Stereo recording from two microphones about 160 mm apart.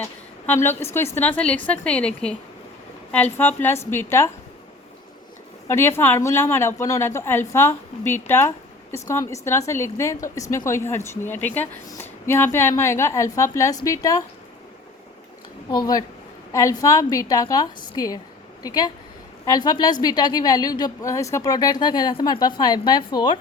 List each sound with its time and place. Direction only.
0.0 s a woman's voice: 10° left (ahead or behind)
3.3 s a woman's voice: 10° left (ahead or behind)
5.6 s a woman's voice: 15° left (ahead or behind)
15.7 s a woman's voice: 25° left (ahead or behind)